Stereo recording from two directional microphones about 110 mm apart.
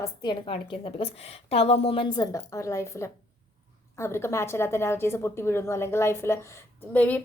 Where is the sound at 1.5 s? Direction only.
65° left (ahead or behind).